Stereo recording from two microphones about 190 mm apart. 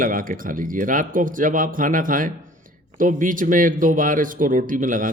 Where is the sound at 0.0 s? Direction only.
45° right (ahead or behind).